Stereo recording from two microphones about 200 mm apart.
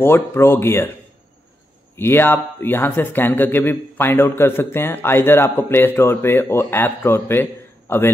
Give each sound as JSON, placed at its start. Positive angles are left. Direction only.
{"t": 0.0, "sound": "speech", "side_deg": 10}
{"t": 2.0, "sound": "speech", "side_deg": 10}